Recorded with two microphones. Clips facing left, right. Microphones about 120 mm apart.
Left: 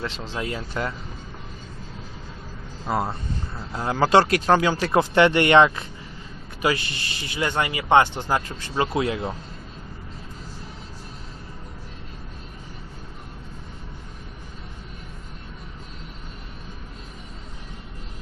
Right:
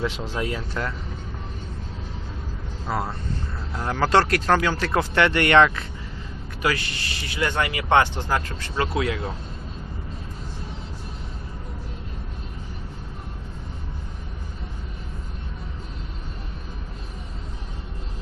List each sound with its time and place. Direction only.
0.0 s speech: 10° right (ahead or behind)
0.3 s speech: centre (ahead or behind)
2.8 s speech: 15° left (ahead or behind)
8.7 s speech: 25° left (ahead or behind)